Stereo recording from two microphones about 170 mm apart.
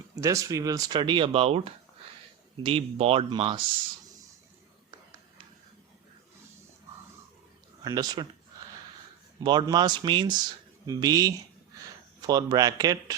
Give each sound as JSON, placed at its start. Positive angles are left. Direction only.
{"t": 0.2, "sound": "speech", "side_deg": -20}
{"t": 7.9, "sound": "speech", "side_deg": -25}
{"t": 9.4, "sound": "speech", "side_deg": -25}